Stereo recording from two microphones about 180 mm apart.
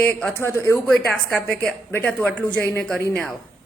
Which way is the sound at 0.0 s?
10° left (ahead or behind).